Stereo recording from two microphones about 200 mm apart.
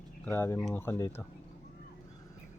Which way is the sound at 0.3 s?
10° left (ahead or behind).